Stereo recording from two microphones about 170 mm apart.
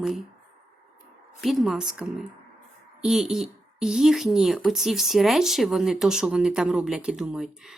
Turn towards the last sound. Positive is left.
turn(degrees=-5)  # may be behind; listen again after turning